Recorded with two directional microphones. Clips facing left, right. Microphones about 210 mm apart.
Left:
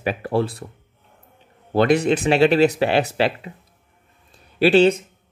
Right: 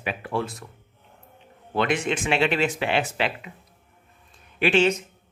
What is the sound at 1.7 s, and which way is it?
Speech, 40° left (ahead or behind).